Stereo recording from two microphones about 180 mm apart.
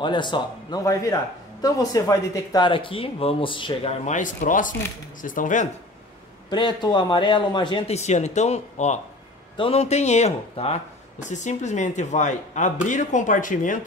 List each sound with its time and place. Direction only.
0.0 s a man's voice: 25° left (ahead or behind)
4.0 s speech: 45° left (ahead or behind)
6.5 s a man's voice: 25° left (ahead or behind); by 13.7 s 45° left (ahead or behind)